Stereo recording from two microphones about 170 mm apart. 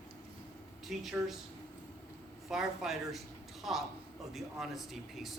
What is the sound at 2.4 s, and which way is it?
Speech, centre (ahead or behind).